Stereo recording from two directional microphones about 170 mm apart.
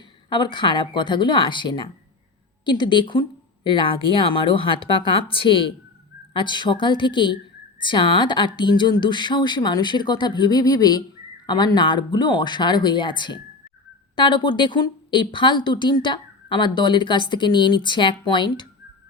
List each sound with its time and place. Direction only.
0.3 s speech: 25° left (ahead or behind)